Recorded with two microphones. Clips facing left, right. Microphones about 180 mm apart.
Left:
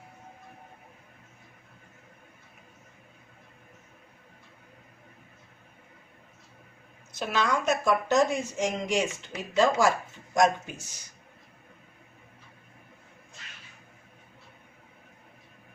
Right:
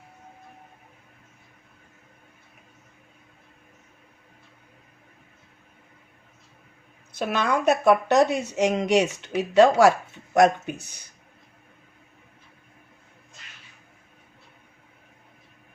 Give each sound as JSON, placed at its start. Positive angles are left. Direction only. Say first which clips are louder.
{"t": 7.1, "sound": "a woman's voice", "louder": "right 3 dB", "side_deg": -55}